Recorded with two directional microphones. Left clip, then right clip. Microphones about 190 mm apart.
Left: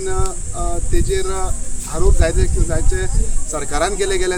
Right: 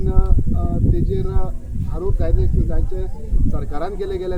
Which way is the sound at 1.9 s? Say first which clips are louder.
Left 6 dB; 45° left (ahead or behind).